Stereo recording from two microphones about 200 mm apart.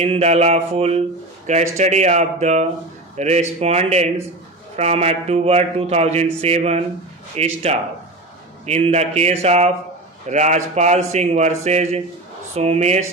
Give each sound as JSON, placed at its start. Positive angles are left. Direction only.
{"t": 0.0, "sound": "a man's voice", "side_deg": -30}